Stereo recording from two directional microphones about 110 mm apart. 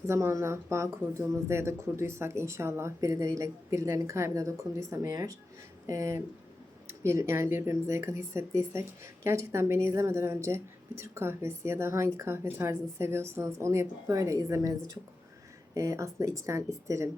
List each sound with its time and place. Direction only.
0.1 s speech: 25° right (ahead or behind)